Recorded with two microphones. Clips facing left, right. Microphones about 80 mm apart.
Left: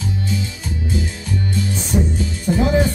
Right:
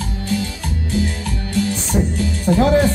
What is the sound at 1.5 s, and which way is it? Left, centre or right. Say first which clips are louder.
Music: right 4 dB; right.